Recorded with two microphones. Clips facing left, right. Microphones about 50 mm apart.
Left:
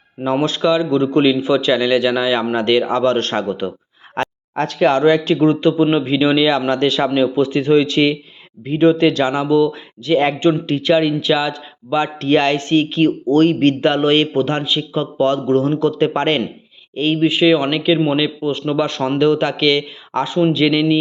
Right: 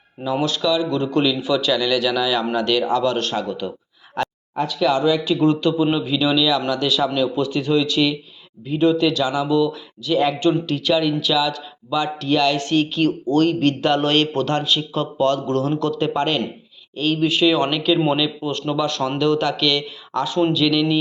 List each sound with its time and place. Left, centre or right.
0.3 s a man's voice: left
4.2 s a sound: left
4.5 s speech: left
5.4 s a man's voice: left
7.1 s a man's voice: left
9.5 s a man's voice: left
16.0 s a man's voice: left